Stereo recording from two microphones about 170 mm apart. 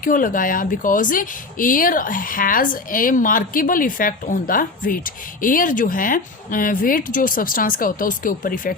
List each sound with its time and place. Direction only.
0.0 s a woman's voice: 55° left (ahead or behind)